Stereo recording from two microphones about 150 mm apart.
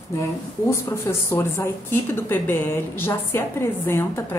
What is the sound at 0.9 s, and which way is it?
A woman's voice, 15° left (ahead or behind).